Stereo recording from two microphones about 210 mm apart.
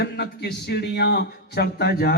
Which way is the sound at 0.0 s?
50° left (ahead or behind).